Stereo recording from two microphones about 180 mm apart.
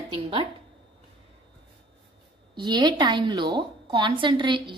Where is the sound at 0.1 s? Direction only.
30° right (ahead or behind).